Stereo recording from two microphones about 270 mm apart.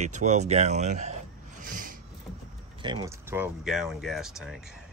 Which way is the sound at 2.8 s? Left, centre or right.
Centre.